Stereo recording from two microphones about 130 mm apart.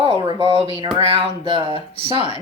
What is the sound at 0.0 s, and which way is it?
Speech, 40° right (ahead or behind).